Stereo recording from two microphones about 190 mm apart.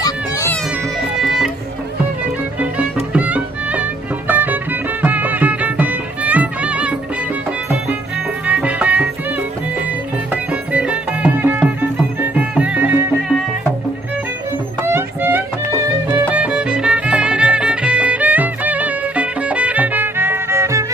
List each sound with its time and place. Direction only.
0.0 s music: 15° left (ahead or behind)
1.2 s music: centre (ahead or behind)
2.6 s music: 5° right (ahead or behind)
8.4 s music: 5° right (ahead or behind)
10.3 s music: 5° right (ahead or behind)
14.8 s music: 15° right (ahead or behind)